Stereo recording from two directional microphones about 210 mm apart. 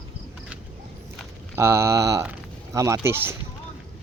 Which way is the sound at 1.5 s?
10° right (ahead or behind).